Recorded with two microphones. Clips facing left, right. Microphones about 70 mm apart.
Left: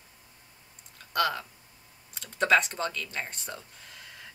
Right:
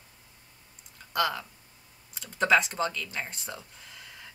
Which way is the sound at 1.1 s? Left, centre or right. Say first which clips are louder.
Left 1 dB; centre.